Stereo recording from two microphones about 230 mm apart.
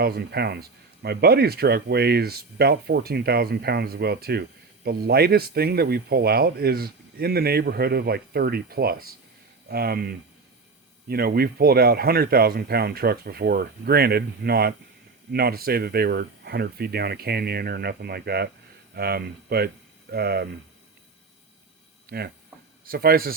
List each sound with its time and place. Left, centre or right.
0.0 s speech: right
22.1 s speech: right